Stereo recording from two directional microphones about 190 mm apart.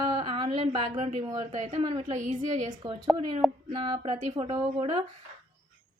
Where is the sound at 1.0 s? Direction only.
40° right (ahead or behind).